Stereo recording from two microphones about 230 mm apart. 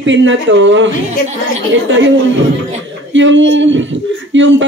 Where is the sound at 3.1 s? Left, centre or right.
Right.